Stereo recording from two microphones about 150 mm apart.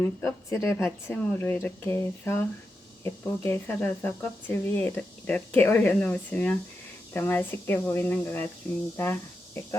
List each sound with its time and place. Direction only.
0.0 s speech: 15° left (ahead or behind)